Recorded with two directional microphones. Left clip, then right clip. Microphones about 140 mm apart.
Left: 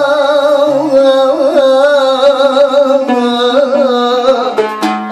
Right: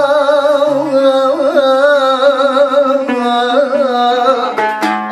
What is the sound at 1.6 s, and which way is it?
Music, 45° left (ahead or behind).